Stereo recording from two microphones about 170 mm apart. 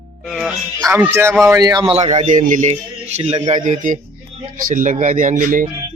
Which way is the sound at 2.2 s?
50° right (ahead or behind).